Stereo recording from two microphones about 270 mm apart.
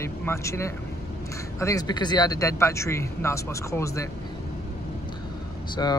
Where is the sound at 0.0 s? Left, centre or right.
Centre.